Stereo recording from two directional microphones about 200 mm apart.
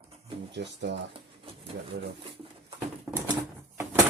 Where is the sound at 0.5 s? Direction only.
60° right (ahead or behind).